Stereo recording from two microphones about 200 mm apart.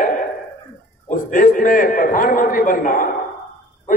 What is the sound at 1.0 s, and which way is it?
A man's voice, 40° left (ahead or behind).